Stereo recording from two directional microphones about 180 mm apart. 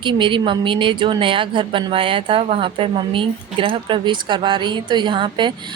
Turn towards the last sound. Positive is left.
turn(degrees=-25)  # may be behind; listen again after turning